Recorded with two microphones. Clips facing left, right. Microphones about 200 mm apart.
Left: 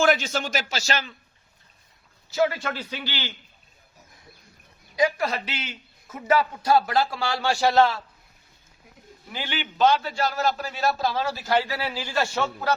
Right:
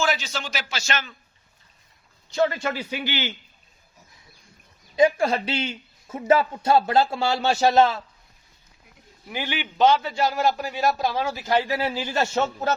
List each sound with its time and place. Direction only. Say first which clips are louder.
0.0 s speech: left 4 dB; 50° left (ahead or behind); by 1.1 s 35° left (ahead or behind)
2.3 s a man's voice: right 1 dB; 5° left (ahead or behind); by 3.3 s 15° right (ahead or behind)
4.9 s a man's voice: right 4 dB; 25° right (ahead or behind)
9.3 s a man's voice: right 2 dB; 15° right (ahead or behind)